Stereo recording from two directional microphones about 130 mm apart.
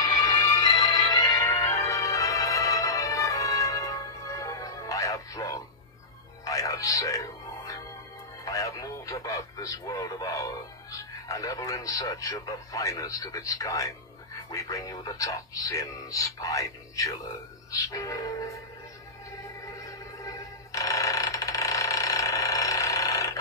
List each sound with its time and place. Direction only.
0.0 s music: 30° left (ahead or behind)
8.5 s speech: 25° left (ahead or behind)
19.3 s a sound: 25° left (ahead or behind)